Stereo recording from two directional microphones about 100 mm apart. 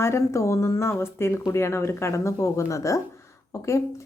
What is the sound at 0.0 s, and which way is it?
A woman's voice, 30° left (ahead or behind).